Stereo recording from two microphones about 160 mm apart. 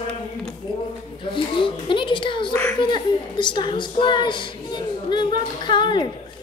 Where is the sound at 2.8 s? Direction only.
30° left (ahead or behind).